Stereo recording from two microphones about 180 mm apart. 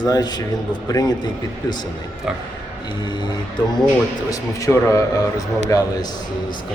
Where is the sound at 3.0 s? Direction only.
25° left (ahead or behind).